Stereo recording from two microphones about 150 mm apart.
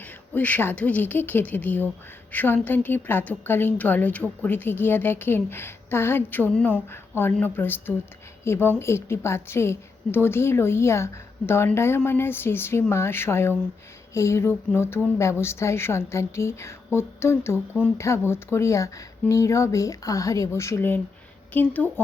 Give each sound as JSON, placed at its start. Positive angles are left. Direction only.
{"t": 0.0, "sound": "a woman's voice", "side_deg": 10}